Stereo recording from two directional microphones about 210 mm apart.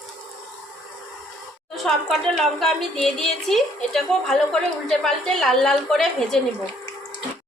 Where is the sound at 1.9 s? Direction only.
Centre (ahead or behind).